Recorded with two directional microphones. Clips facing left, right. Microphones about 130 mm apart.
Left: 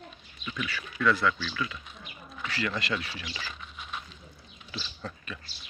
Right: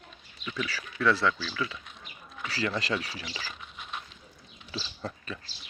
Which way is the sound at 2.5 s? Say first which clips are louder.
Right 1 dB; 35° right (ahead or behind).